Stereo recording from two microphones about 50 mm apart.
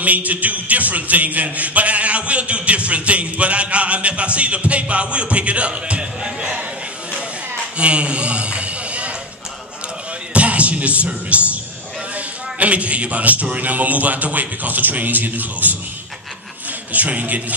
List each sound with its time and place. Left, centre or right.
0.0 s a man's voice: right
7.7 s a sound: right
10.3 s a man's voice: right
16.9 s a man's voice: right